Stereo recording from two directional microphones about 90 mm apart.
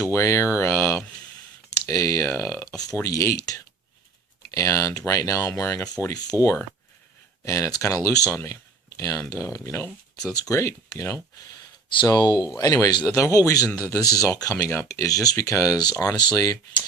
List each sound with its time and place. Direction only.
0.0 s speech: 30° left (ahead or behind)
6.3 s speech: 25° right (ahead or behind)
7.4 s speech: 35° left (ahead or behind)
12.0 s speech: 50° left (ahead or behind)
14.5 s speech: 30° left (ahead or behind)